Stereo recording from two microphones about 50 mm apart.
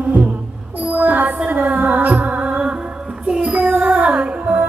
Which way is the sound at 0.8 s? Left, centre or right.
Right.